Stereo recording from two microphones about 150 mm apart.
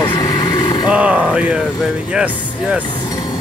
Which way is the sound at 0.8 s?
5° right (ahead or behind).